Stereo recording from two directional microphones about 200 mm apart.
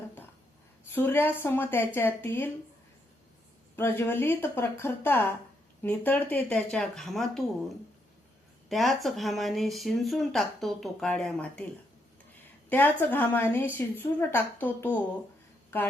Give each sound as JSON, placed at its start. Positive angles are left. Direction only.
{"t": 0.9, "sound": "speech", "side_deg": 10}
{"t": 3.8, "sound": "speech", "side_deg": 10}
{"t": 8.7, "sound": "speech", "side_deg": 0}
{"t": 12.7, "sound": "speech", "side_deg": 10}